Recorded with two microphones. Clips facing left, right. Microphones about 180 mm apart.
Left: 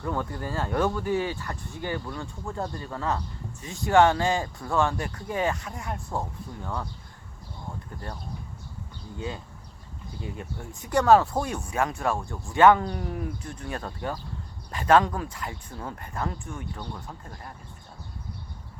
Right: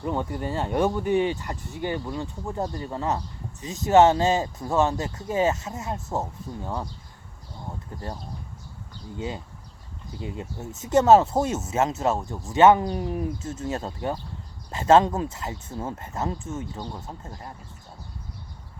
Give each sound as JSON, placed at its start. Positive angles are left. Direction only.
{"t": 0.0, "sound": "speech", "side_deg": -20}
{"t": 9.1, "sound": "speech", "side_deg": -20}